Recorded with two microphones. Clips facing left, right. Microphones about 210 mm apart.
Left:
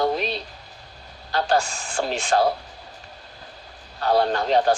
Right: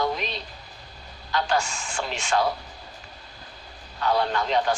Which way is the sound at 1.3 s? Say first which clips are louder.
Left 3 dB; 35° left (ahead or behind).